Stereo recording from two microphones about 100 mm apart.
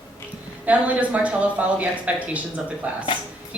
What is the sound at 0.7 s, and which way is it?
Speech, 15° right (ahead or behind).